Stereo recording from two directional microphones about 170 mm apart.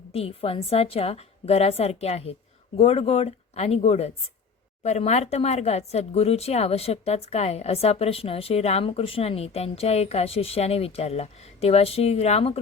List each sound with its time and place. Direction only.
0.1 s speech: 35° left (ahead or behind)